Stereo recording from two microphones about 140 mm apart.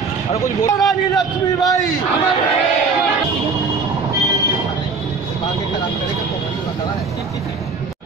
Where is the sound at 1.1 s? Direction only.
25° left (ahead or behind).